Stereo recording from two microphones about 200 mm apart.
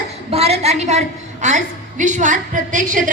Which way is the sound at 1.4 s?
40° right (ahead or behind).